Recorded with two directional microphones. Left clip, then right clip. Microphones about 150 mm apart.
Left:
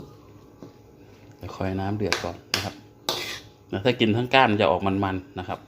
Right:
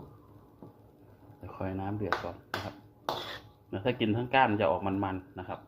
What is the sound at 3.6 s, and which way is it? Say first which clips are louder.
A man's voice: left 8 dB; 55° left (ahead or behind).